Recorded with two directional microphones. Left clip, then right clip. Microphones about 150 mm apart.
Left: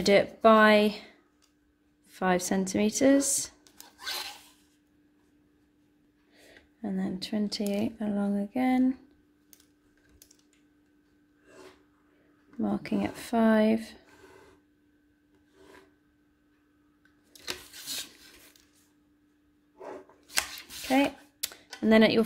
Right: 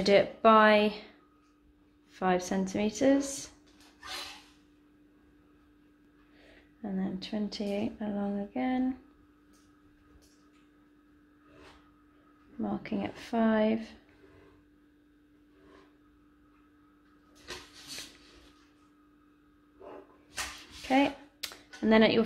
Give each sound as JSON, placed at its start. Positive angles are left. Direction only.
{"t": 0.0, "sound": "speech", "side_deg": 45}
{"t": 2.1, "sound": "speech", "side_deg": 55}
{"t": 6.3, "sound": "speech", "side_deg": 55}
{"t": 12.5, "sound": "speech", "side_deg": 50}
{"t": 20.9, "sound": "a sound", "side_deg": 40}